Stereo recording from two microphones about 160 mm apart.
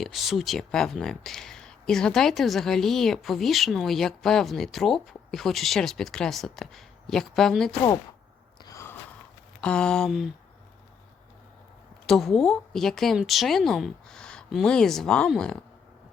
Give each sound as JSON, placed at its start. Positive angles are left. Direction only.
{"t": 0.0, "sound": "speech", "side_deg": 0}
{"t": 8.6, "sound": "a sound", "side_deg": 20}
{"t": 9.6, "sound": "speech", "side_deg": 5}
{"t": 12.0, "sound": "speech", "side_deg": 0}